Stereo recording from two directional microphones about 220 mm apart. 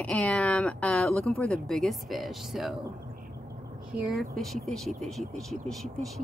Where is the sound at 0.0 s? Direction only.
5° left (ahead or behind).